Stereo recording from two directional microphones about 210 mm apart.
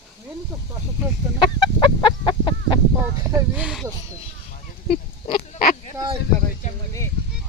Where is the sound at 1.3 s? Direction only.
25° left (ahead or behind).